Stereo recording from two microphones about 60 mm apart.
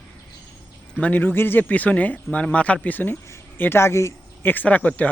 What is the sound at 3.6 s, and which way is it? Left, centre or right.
Speech, left.